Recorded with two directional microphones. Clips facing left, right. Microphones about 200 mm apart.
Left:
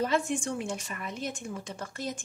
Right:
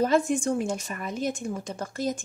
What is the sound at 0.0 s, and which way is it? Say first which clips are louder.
Speech: right 6 dB; 40° right (ahead or behind).